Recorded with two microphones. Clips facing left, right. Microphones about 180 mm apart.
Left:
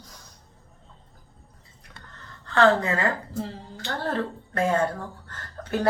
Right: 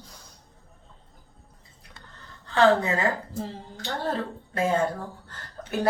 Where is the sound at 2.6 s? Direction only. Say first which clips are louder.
Even; 20° right (ahead or behind).